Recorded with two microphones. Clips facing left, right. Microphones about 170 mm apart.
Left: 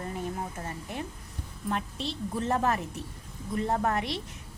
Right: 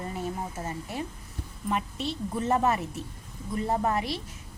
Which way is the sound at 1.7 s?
5° right (ahead or behind).